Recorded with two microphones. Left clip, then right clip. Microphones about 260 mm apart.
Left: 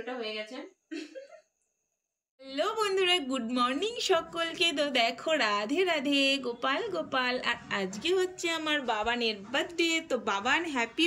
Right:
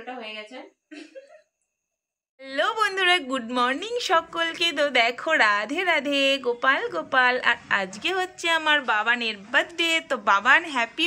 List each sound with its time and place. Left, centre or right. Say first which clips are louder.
2.4 s a woman's voice: right 7 dB; centre